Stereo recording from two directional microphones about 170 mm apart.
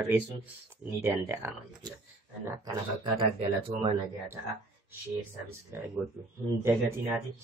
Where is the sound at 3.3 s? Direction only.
35° right (ahead or behind).